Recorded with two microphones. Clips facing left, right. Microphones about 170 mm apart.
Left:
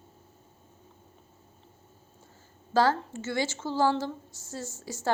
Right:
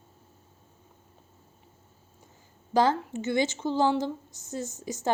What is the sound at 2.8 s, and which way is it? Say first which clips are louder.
A woman's voice: right 1 dB; 20° right (ahead or behind).